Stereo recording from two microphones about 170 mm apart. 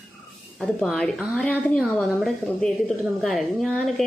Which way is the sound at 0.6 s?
Centre (ahead or behind).